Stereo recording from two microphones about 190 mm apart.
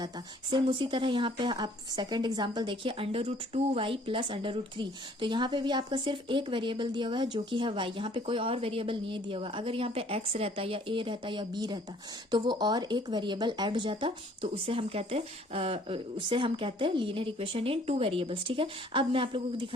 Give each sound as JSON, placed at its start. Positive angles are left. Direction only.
{"t": 0.5, "sound": "a woman's voice", "side_deg": -25}